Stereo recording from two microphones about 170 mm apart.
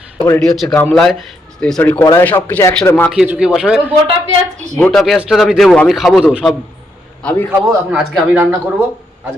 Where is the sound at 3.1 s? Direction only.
5° right (ahead or behind).